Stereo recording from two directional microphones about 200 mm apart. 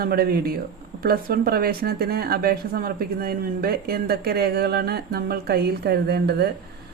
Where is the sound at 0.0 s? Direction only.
50° right (ahead or behind).